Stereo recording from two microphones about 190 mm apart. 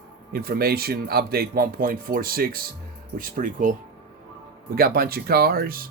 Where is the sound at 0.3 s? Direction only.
55° right (ahead or behind).